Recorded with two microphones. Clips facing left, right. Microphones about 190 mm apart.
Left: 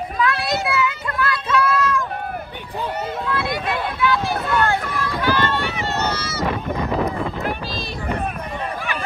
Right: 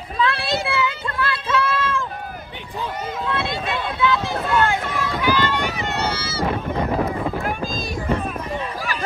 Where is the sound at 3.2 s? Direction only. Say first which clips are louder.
Even; 25° right (ahead or behind).